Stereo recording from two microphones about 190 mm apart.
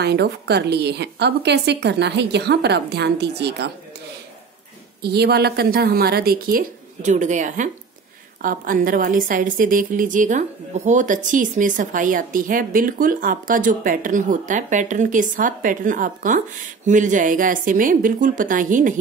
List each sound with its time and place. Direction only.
0.0 s a woman's voice: 60° right (ahead or behind)
5.0 s a woman's voice: 60° right (ahead or behind)